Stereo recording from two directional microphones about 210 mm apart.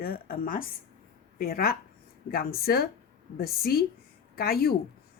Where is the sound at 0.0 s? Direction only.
45° left (ahead or behind).